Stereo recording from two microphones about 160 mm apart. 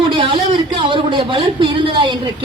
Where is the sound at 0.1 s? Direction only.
30° right (ahead or behind).